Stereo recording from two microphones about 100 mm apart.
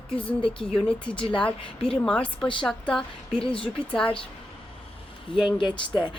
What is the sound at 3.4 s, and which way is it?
Speech, 65° left (ahead or behind).